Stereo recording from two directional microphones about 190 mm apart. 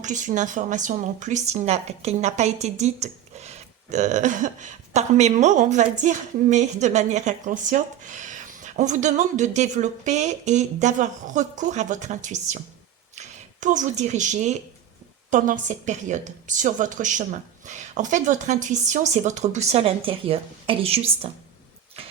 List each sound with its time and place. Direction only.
0.0 s speech: 40° right (ahead or behind)